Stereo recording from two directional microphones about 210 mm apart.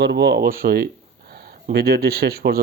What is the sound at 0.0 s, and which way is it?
Speech, 55° right (ahead or behind).